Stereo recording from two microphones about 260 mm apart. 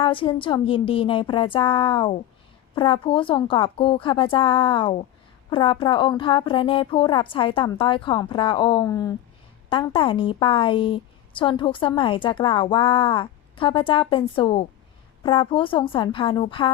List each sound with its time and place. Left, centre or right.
0.0 s a woman's voice: centre